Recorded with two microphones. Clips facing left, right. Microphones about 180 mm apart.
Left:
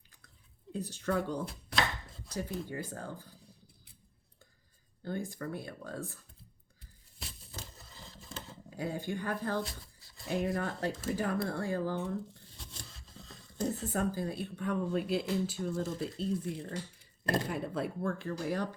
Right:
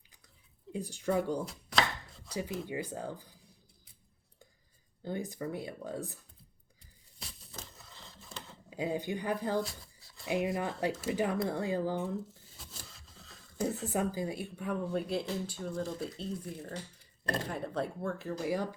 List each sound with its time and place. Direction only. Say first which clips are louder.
0.7 s speech: right 1 dB; 10° right (ahead or behind)
5.0 s speech: right 1 dB; 15° right (ahead or behind)
8.7 s speech: right 2 dB; 15° right (ahead or behind)
9.6 s a sound: right 3 dB; centre (ahead or behind)
10.2 s speech: right 1 dB; 10° right (ahead or behind)
12.0 s a sound: even; 5° right (ahead or behind)
13.9 s speech: right 1 dB; 15° right (ahead or behind)